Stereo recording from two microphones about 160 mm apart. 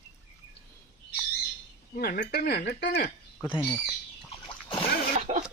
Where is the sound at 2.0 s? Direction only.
60° left (ahead or behind); by 3.1 s 85° left.